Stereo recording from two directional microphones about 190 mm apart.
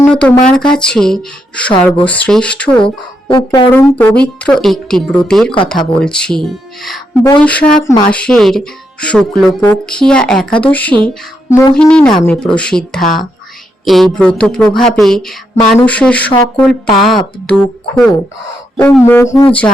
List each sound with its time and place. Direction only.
0.0 s speech: 5° left (ahead or behind)
2.8 s speech: 25° left (ahead or behind)
3.7 s speech: 10° left (ahead or behind)
5.7 s speech: 25° left (ahead or behind)
6.0 s speech: 5° left (ahead or behind)